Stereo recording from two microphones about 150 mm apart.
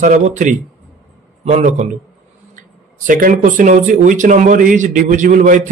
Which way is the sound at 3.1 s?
65° right (ahead or behind).